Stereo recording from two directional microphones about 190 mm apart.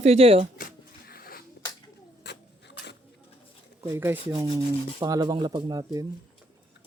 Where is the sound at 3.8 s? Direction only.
10° right (ahead or behind).